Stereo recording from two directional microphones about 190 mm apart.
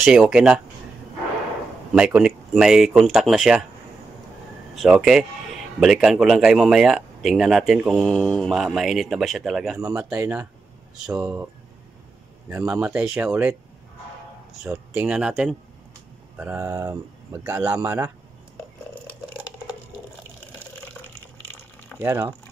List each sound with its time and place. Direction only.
0.0 s a man's voice: 5° right (ahead or behind)
2.0 s a man's voice: 5° right (ahead or behind)
4.7 s a man's voice: 5° right (ahead or behind)
9.8 s speech: 15° right (ahead or behind)
12.4 s speech: 10° right (ahead or behind)
14.6 s a man's voice: 5° right (ahead or behind)
22.0 s speech: 15° right (ahead or behind)